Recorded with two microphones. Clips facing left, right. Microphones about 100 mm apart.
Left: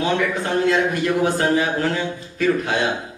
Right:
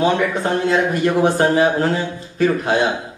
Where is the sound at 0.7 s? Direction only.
30° right (ahead or behind).